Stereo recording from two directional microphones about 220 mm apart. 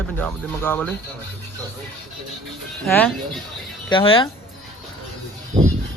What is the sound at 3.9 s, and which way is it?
Speech, 25° left (ahead or behind).